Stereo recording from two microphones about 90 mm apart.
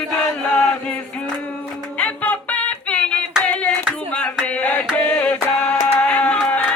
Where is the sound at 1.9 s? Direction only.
15° left (ahead or behind).